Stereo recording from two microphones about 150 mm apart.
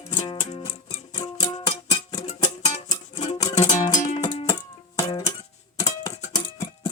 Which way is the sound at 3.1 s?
50° left (ahead or behind).